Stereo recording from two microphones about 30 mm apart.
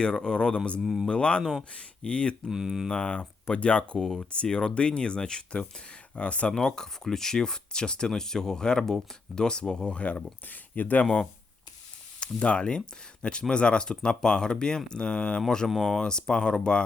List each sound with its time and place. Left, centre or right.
0.0 s speech: left
0.8 s mantra: centre
1.1 s speech: left
2.5 s mantra: centre
2.9 s speech: left
3.9 s speech: centre
4.2 s speech: left
6.5 s speech: left
9.9 s speech: left
10.5 s speech: left
12.2 s speech: left
15.4 s speech: centre